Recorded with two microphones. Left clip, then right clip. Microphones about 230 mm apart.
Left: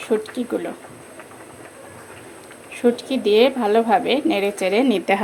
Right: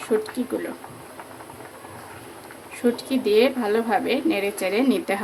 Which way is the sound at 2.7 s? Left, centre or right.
Centre.